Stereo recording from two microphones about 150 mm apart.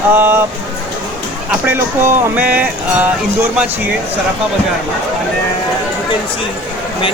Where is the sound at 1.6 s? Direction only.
15° right (ahead or behind).